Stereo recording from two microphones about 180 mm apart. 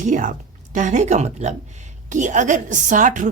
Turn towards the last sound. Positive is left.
turn(degrees=-45)  # may be behind; listen again after turning